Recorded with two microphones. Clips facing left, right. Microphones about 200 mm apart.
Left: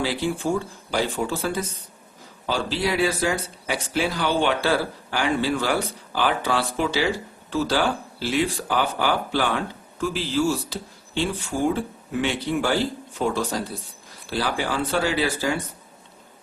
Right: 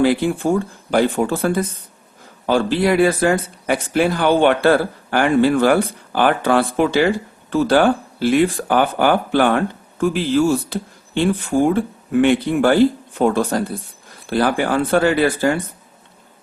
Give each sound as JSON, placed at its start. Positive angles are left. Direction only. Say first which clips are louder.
{"t": 0.0, "sound": "speech", "louder": "right 8 dB", "side_deg": -55}